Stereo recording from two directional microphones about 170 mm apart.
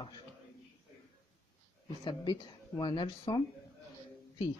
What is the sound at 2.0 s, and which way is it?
Speech, 25° left (ahead or behind).